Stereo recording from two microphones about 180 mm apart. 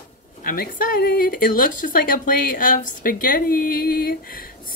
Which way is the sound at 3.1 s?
50° left (ahead or behind).